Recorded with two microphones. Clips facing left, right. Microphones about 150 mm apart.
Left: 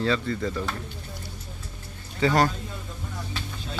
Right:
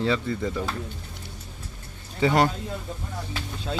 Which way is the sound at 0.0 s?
15° right (ahead or behind).